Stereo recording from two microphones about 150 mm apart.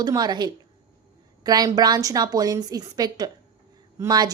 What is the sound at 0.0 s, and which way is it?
A woman's voice, 25° right (ahead or behind).